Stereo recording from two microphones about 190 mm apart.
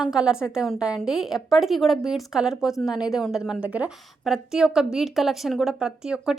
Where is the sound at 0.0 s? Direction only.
5° right (ahead or behind).